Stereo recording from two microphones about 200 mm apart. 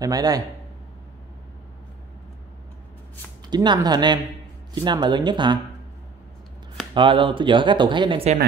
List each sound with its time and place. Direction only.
0.0 s a man's voice: 20° right (ahead or behind)
3.4 s speech: 20° right (ahead or behind)
6.9 s speech: 25° right (ahead or behind)